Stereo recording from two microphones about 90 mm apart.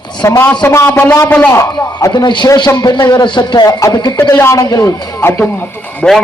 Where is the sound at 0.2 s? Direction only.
35° left (ahead or behind).